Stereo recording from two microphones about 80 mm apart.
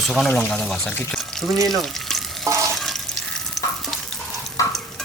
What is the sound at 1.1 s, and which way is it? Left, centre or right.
Frying, centre.